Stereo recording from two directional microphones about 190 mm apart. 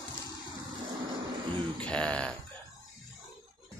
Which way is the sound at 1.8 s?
5° left (ahead or behind).